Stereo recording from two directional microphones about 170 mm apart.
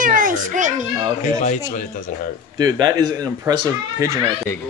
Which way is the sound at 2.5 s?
25° right (ahead or behind).